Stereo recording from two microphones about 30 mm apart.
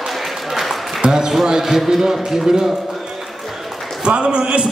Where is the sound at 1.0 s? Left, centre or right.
Right.